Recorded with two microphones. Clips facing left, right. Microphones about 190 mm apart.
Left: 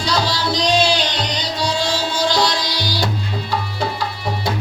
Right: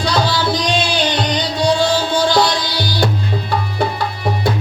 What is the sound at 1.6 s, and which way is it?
Music, 55° right (ahead or behind).